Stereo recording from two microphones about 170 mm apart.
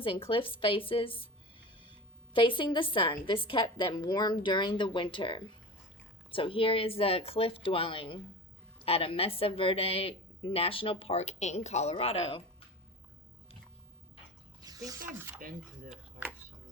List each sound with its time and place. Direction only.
0.0 s a woman's voice: 30° left (ahead or behind)
14.6 s a sound: 20° right (ahead or behind)
15.0 s speech: 15° right (ahead or behind)
15.4 s speech: 55° right (ahead or behind)